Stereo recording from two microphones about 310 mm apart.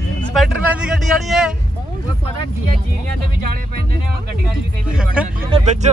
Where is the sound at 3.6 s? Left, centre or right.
Right.